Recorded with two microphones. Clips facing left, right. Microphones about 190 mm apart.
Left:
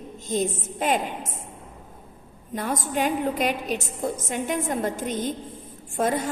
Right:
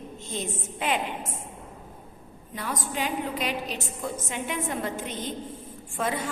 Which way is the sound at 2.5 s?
50° left (ahead or behind).